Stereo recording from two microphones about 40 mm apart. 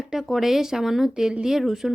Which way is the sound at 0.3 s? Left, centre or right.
Centre.